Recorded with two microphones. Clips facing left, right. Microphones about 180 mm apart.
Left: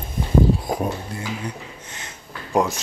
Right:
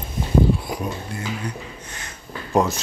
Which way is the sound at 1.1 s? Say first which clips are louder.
Right 1 dB; 25° left (ahead or behind).